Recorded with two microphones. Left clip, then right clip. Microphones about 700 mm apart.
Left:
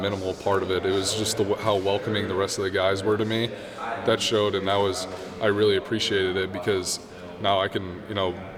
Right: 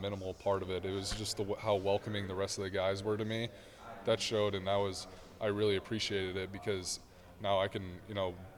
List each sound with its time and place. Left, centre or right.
0.0 s speech: right